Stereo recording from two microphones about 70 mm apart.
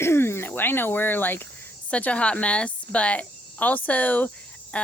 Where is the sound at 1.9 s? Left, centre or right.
Centre.